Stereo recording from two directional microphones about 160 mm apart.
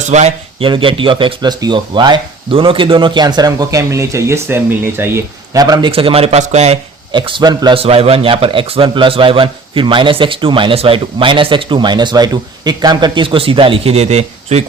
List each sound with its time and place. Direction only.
0.1 s a man's voice: 45° right (ahead or behind)
0.7 s a man's voice: 35° right (ahead or behind)
5.9 s a man's voice: 35° right (ahead or behind)
7.1 s a man's voice: 30° right (ahead or behind)